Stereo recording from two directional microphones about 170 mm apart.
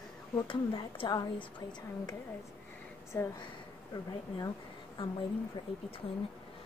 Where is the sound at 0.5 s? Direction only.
30° left (ahead or behind).